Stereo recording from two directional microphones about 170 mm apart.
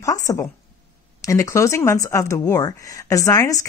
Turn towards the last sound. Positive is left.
turn(degrees=20)  # may be behind; listen again after turning